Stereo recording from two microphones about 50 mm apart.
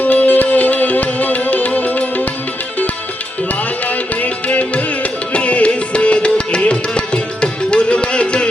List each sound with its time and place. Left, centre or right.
0.0 s music: left
3.5 s music: left